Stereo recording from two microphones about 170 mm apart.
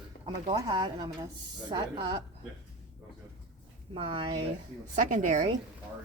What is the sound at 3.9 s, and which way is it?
Speech, 35° right (ahead or behind).